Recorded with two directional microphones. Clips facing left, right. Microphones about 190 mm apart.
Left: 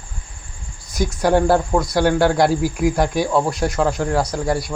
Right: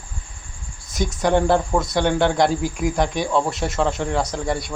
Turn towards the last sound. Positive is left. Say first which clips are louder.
# left 3 dB
turn(degrees=5)  # may be behind; listen again after turning